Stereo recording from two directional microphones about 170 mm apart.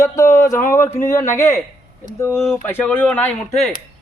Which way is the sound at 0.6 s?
50° left (ahead or behind).